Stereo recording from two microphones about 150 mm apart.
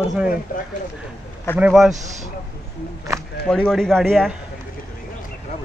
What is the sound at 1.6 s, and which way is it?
Speech, 5° right (ahead or behind).